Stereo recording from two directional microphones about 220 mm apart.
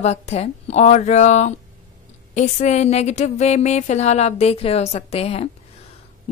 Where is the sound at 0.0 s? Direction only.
30° left (ahead or behind).